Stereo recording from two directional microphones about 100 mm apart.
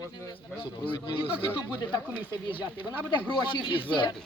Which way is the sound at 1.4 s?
55° left (ahead or behind).